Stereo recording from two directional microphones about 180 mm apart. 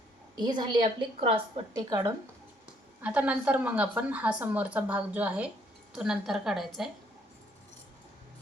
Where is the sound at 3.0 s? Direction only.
10° right (ahead or behind).